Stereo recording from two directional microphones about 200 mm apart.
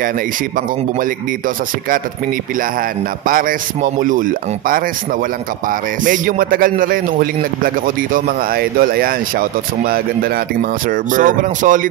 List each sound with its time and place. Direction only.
3.3 s a man's voice: 45° right (ahead or behind)